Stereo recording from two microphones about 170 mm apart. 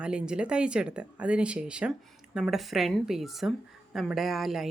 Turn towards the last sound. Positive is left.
turn(degrees=0)  # may be behind; listen again after turning